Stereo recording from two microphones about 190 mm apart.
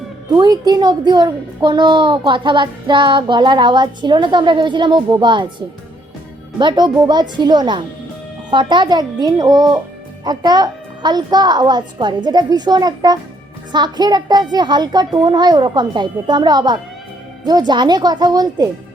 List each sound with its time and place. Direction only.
0.3 s a child's voice: 20° right (ahead or behind)